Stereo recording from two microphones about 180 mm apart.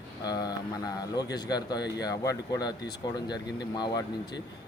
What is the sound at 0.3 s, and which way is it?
Speech, 20° left (ahead or behind).